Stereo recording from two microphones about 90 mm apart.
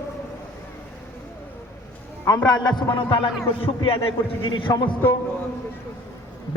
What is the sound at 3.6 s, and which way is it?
Speech, 90° left.